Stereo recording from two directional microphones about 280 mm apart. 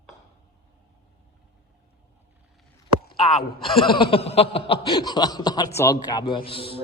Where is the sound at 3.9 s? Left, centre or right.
Centre.